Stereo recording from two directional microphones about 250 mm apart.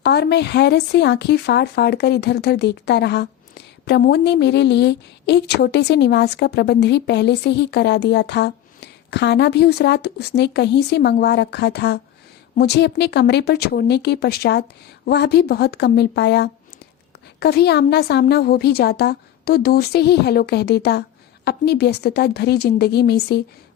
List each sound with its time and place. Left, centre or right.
0.0 s speech: left